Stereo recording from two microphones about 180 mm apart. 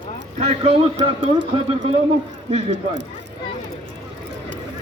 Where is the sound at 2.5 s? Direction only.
40° right (ahead or behind).